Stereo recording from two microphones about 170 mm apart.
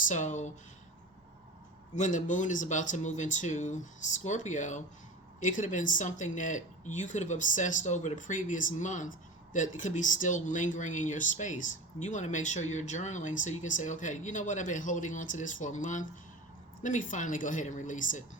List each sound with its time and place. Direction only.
0.1 s speech: 45° left (ahead or behind)
2.0 s speech: 45° left (ahead or behind)